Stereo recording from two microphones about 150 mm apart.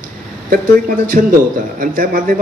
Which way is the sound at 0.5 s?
65° right (ahead or behind).